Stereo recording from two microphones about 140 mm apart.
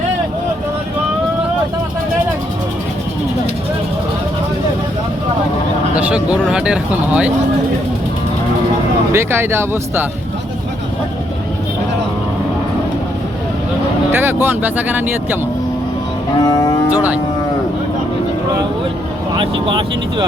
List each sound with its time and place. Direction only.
5.9 s speech: 10° right (ahead or behind)
9.1 s speech: 15° right (ahead or behind)
14.1 s speech: 15° right (ahead or behind)
16.5 s moo: 25° left (ahead or behind)
19.4 s speech: 35° right (ahead or behind)